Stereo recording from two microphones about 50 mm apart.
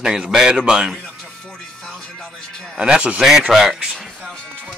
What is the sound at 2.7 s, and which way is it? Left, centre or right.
A man's voice, centre.